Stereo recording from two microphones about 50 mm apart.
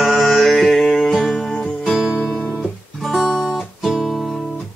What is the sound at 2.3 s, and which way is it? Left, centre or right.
Guitar, left.